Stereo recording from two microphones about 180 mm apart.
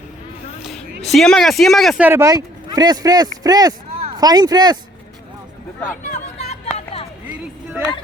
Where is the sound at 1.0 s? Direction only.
Centre (ahead or behind).